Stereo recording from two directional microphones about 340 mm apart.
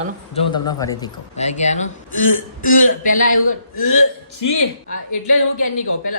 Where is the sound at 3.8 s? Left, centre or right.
Left.